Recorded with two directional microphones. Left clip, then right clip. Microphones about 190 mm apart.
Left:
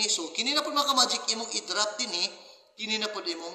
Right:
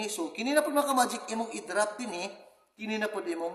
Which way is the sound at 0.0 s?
55° right (ahead or behind).